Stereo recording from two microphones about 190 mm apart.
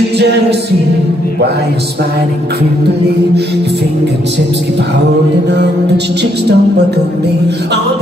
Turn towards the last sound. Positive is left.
turn(degrees=-60)  # may be behind; listen again after turning